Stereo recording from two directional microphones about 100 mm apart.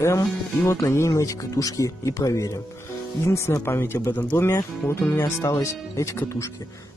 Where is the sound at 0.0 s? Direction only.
30° left (ahead or behind).